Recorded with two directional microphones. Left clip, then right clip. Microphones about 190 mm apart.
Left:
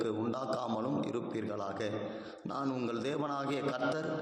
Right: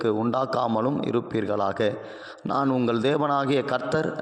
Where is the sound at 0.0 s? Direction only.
45° right (ahead or behind).